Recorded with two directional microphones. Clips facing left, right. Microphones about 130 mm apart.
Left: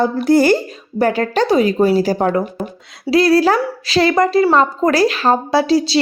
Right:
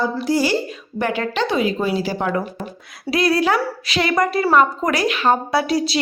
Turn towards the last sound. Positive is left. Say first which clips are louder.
# left 5 dB
turn(degrees=30)  # may be behind; listen again after turning